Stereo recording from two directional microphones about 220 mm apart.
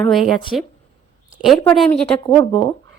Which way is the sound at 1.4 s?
Centre (ahead or behind).